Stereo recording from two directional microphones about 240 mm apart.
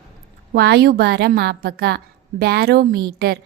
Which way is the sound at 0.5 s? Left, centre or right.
Right.